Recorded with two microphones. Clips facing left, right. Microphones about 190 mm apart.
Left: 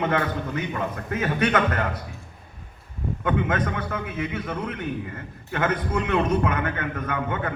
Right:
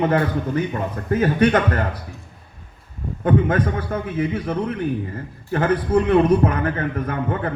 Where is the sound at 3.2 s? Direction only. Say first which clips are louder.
Right 6 dB; 35° right (ahead or behind).